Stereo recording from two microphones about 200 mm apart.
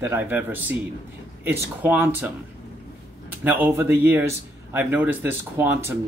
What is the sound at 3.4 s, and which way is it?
Speech, 10° right (ahead or behind).